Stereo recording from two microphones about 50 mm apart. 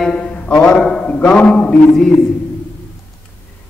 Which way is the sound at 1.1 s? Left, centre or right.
Left.